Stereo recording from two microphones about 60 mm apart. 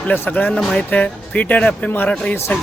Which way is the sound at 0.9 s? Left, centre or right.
Left.